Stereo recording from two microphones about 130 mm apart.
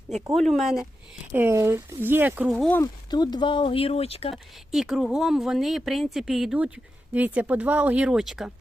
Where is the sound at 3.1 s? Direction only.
35° left (ahead or behind); by 4.3 s 50° left (ahead or behind).